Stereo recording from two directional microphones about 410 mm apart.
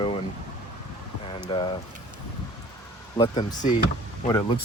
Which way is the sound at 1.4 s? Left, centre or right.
Centre.